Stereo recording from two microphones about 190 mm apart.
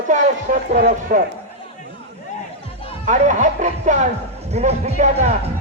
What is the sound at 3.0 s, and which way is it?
Speech, 40° right (ahead or behind).